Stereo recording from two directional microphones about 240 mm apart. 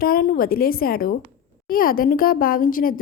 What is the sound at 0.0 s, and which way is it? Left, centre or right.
A woman's voice, left.